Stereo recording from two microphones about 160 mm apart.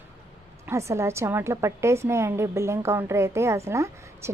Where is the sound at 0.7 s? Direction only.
15° right (ahead or behind).